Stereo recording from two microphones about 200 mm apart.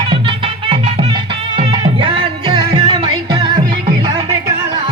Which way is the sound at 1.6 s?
25° right (ahead or behind).